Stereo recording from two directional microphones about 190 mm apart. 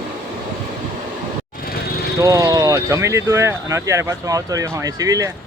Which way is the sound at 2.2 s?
20° right (ahead or behind).